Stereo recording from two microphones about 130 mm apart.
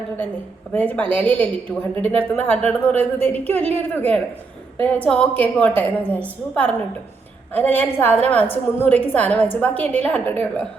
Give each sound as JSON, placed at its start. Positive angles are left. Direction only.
{"t": 0.7, "sound": "a woman's voice", "side_deg": 10}